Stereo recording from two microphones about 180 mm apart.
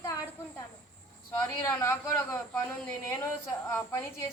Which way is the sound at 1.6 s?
15° left (ahead or behind).